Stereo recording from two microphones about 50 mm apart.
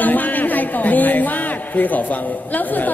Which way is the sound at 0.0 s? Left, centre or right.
Left.